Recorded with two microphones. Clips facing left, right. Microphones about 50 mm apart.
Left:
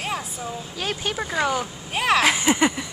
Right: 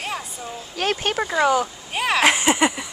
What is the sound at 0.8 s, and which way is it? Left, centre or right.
Speech, right.